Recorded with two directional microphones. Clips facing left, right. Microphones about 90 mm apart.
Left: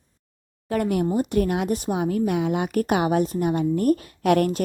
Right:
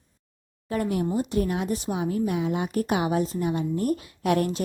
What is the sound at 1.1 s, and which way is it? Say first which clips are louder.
A woman's voice: left 3 dB; 55° left (ahead or behind).